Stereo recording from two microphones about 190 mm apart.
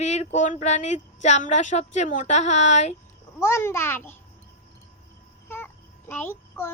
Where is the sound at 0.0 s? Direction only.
35° left (ahead or behind).